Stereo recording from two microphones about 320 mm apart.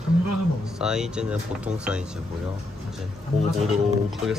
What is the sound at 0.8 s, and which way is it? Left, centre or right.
Speech, centre.